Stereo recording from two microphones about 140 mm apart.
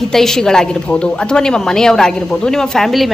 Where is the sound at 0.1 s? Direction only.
5° left (ahead or behind).